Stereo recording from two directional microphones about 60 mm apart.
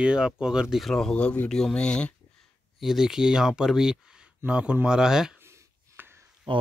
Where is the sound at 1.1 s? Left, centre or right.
Left.